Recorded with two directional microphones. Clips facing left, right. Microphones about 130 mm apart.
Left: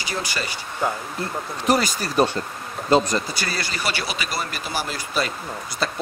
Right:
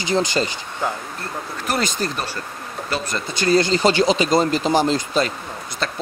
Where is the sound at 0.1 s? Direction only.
20° right (ahead or behind).